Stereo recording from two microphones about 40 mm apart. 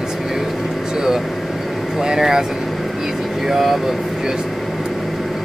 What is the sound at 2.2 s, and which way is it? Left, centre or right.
Speech, centre.